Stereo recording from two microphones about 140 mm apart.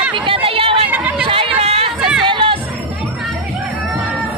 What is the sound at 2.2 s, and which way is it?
Music, 35° right (ahead or behind).